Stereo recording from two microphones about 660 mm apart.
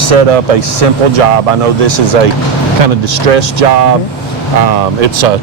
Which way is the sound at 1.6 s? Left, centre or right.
Right.